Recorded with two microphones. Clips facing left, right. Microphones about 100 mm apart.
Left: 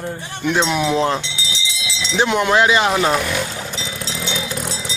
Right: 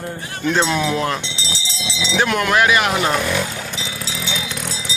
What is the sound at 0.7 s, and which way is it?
Speech, 15° left (ahead or behind).